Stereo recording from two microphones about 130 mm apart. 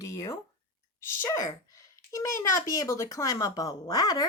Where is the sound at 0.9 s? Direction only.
20° left (ahead or behind).